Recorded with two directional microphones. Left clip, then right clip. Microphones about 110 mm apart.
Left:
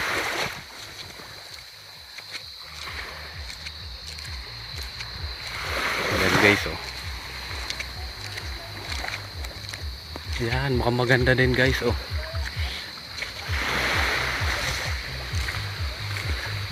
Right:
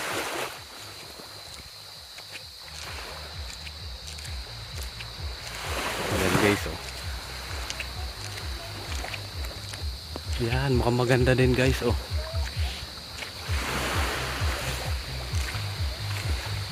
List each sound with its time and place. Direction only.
0.0 s boat: 40° left (ahead or behind)
5.6 s boat: 15° left (ahead or behind)
6.3 s a sound: 35° left (ahead or behind)
10.4 s speech: 15° right (ahead or behind)
13.4 s music: 10° left (ahead or behind)
16.0 s music: centre (ahead or behind)